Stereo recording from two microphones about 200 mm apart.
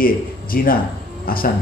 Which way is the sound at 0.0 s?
45° left (ahead or behind).